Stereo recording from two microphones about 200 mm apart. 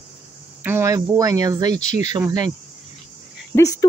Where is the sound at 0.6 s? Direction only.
10° right (ahead or behind).